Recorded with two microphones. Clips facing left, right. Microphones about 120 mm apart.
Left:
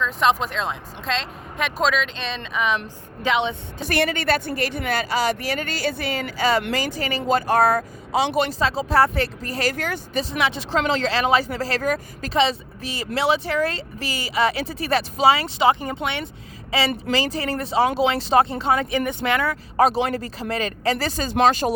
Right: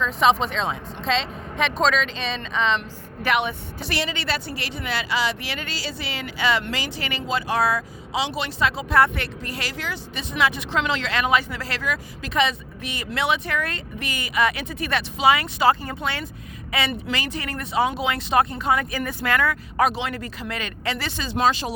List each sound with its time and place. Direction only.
0.0 s speech: centre (ahead or behind)
3.2 s speech: 20° left (ahead or behind)
3.8 s a woman's voice: 50° left (ahead or behind)
10.2 s a woman's voice: 30° left (ahead or behind); by 21.7 s 50° left (ahead or behind)